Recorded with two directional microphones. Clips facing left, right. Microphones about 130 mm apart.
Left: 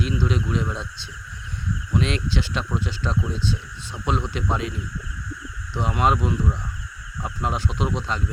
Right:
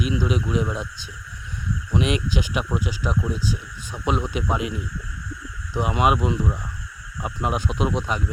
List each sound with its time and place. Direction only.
0.0 s speech: 15° right (ahead or behind)